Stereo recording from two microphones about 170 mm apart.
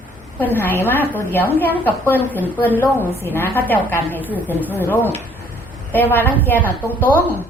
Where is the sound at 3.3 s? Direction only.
10° left (ahead or behind).